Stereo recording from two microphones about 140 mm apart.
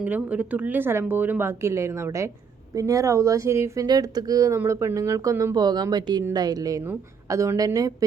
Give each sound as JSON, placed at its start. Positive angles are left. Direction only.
{"t": 0.0, "sound": "speech", "side_deg": -10}